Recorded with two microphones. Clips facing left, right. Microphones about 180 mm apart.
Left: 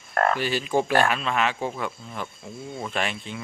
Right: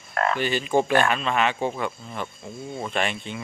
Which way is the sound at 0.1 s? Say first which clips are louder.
Left 2 dB; 45° left (ahead or behind).